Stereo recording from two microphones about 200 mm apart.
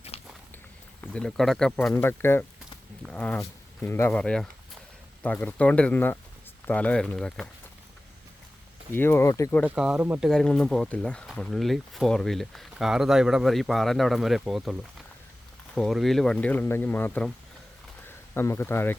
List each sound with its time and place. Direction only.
0.1 s walk: 30° left (ahead or behind)
1.0 s speech: 5° left (ahead or behind)
8.9 s speech: 10° left (ahead or behind)
9.6 s speech: 5° right (ahead or behind)
18.3 s speech: 10° left (ahead or behind)